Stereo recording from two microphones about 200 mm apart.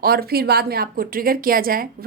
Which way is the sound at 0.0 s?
50° right (ahead or behind).